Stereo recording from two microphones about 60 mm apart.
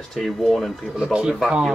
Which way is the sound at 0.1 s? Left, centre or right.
Centre.